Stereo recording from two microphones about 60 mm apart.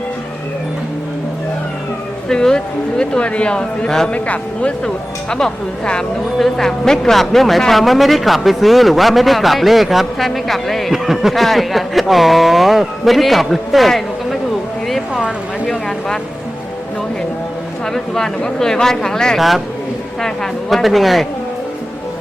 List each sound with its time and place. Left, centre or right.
2.3 s speech: centre
4.1 s a man's voice: left; by 14.3 s centre
15.6 s speech: centre
17.9 s speech: centre
19.4 s a man's voice: centre